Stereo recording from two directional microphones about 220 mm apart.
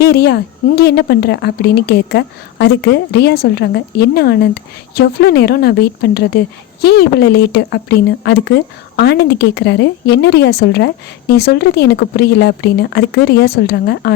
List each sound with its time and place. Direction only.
0.0 s speech: 50° left (ahead or behind)